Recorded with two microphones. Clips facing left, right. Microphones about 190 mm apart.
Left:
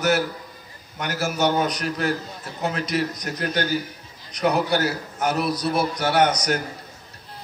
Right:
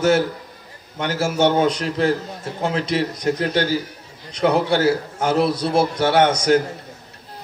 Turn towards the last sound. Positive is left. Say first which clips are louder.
# right 5 dB
turn(degrees=-25)  # may be behind; listen again after turning